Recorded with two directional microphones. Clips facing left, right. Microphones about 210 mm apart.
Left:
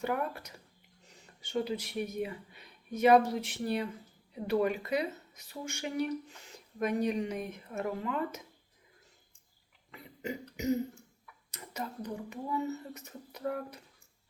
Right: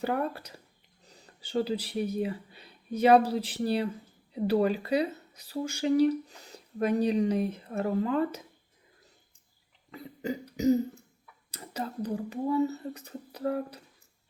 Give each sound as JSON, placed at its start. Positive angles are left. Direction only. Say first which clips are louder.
{"t": 0.0, "sound": "speech", "louder": "right 3 dB", "side_deg": -30}
{"t": 9.9, "sound": "cough", "louder": "right 5 dB", "side_deg": -35}
{"t": 10.6, "sound": "speech", "louder": "right 7 dB", "side_deg": -35}